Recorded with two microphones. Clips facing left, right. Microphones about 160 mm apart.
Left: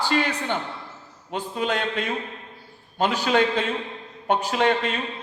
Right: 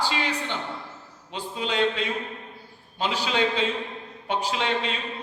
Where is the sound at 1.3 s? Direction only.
50° left (ahead or behind).